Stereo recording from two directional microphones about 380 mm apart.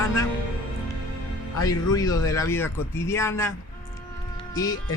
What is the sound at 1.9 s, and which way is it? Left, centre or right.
Speech, centre.